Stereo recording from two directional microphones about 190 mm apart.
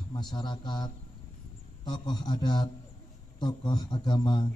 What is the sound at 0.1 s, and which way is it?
A man's voice, 25° left (ahead or behind).